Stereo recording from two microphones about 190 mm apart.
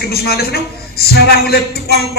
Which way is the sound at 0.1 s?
55° left (ahead or behind).